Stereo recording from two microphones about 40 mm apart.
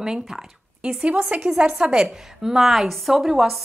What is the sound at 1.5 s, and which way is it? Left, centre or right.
Speech, right.